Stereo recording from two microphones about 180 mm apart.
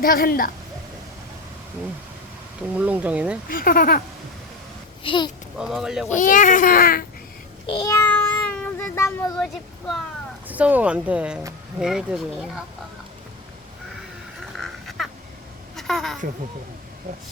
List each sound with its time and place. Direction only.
0.0 s speech: 55° left (ahead or behind)
2.7 s speech: 10° right (ahead or behind)
3.5 s speech: 55° left (ahead or behind)
5.0 s a child's voice: 25° left (ahead or behind)
5.5 s speech: 5° right (ahead or behind)
6.1 s speech: 45° left (ahead or behind)
7.7 s a child's voice: 25° left (ahead or behind)
8.0 s a sound: 10° left (ahead or behind)
9.4 s speech: centre (ahead or behind)
10.5 s speech: 10° right (ahead or behind)
14.5 s a sound: centre (ahead or behind)